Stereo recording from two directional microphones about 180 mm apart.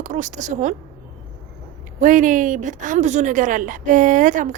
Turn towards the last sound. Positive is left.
turn(degrees=-45)  # may be behind; listen again after turning